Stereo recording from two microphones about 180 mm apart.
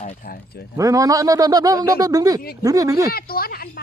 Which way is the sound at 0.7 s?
20° right (ahead or behind).